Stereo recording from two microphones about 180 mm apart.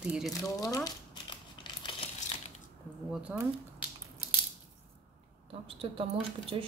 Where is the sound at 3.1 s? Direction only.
5° right (ahead or behind).